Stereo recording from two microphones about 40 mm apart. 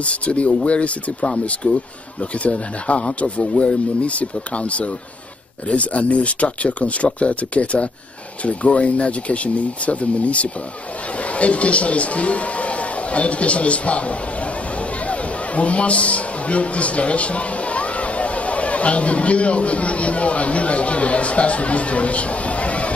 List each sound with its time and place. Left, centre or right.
0.0 s a man's voice: left